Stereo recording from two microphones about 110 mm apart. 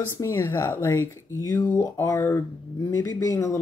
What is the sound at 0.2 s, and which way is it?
Speech, 25° left (ahead or behind).